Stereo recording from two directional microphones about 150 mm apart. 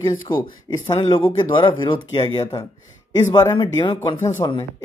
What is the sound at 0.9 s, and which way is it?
Speech, 30° left (ahead or behind).